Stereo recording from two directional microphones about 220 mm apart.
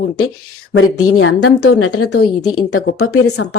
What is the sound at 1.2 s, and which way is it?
Speech, 85° left.